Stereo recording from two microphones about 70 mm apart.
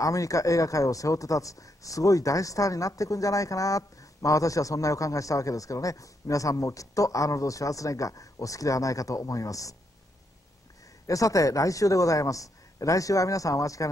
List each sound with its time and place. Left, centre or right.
0.0 s speech: left
11.1 s speech: left